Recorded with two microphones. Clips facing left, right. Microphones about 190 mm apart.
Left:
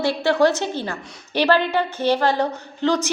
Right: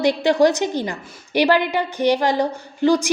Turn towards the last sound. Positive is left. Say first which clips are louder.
# right 4 dB
turn(degrees=-10)  # may be behind; listen again after turning